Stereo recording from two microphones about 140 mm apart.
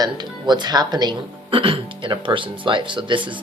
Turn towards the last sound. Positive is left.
turn(degrees=-35)  # may be behind; listen again after turning